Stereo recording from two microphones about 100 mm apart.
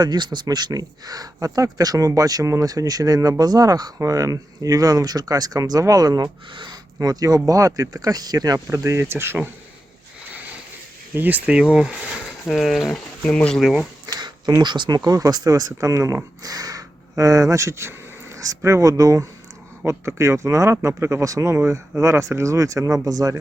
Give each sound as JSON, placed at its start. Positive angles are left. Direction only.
{"t": 0.0, "sound": "speech", "side_deg": -45}
{"t": 6.5, "sound": "speech", "side_deg": -50}
{"t": 11.1, "sound": "speech", "side_deg": -20}
{"t": 13.6, "sound": "speech", "side_deg": -5}
{"t": 14.2, "sound": "a sound", "side_deg": -45}
{"t": 14.6, "sound": "speech", "side_deg": -50}